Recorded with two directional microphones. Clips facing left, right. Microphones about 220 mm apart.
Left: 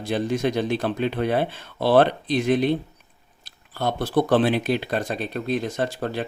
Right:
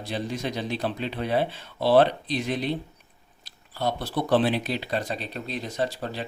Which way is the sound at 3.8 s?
50° left (ahead or behind).